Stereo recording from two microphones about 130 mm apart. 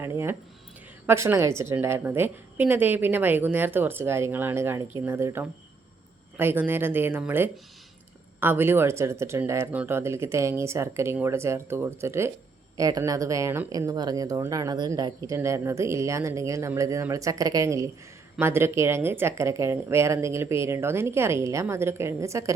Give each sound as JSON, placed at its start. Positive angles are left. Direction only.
{"t": 0.0, "sound": "a woman's voice", "side_deg": -20}